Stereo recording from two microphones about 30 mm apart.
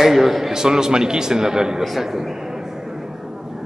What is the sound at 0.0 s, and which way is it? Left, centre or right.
Speech, centre.